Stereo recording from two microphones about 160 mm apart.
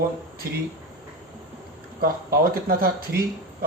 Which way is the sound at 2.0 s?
70° right (ahead or behind).